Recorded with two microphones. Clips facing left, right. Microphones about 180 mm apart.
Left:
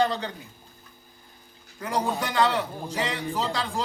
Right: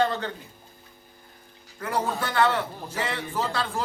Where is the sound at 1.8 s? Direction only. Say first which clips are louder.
Even; 15° left (ahead or behind).